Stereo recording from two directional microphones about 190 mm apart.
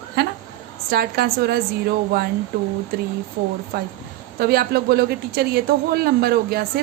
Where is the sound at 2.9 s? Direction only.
55° right (ahead or behind).